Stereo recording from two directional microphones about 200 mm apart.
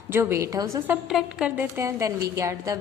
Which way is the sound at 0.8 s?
5° right (ahead or behind).